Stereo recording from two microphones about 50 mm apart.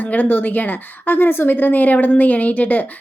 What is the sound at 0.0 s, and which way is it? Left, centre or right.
A woman's voice, left.